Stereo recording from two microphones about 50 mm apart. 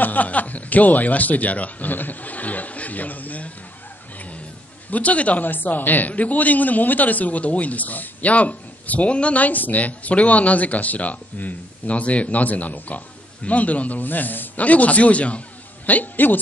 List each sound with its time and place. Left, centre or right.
0.0 s a man's voice: left
4.9 s a man's voice: left
5.5 s a man's voice: left